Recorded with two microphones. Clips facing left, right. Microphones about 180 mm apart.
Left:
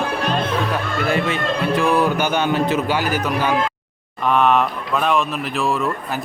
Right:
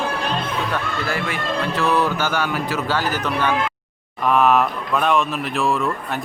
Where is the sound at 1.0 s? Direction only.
20° left (ahead or behind).